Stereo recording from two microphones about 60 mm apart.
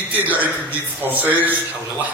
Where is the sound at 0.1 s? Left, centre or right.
Right.